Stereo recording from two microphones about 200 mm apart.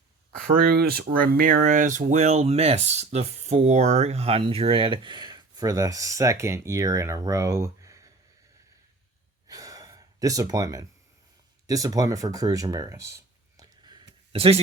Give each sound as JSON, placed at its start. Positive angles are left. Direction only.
{"t": 0.5, "sound": "speech", "side_deg": -50}
{"t": 9.5, "sound": "gasp", "side_deg": -15}
{"t": 11.6, "sound": "speech", "side_deg": -15}
{"t": 13.6, "sound": "a sound", "side_deg": -20}
{"t": 14.3, "sound": "speech", "side_deg": -30}